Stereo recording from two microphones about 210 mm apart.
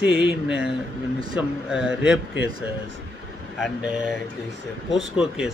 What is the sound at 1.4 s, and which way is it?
Speech, 5° right (ahead or behind).